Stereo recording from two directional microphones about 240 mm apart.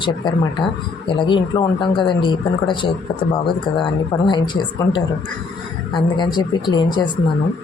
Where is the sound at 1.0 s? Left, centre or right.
Centre.